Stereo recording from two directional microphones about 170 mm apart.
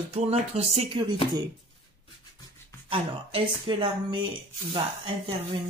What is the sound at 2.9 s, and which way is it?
A woman's voice, 30° right (ahead or behind).